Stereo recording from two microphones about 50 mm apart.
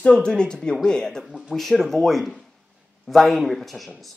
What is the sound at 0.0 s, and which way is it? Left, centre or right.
Speech, centre.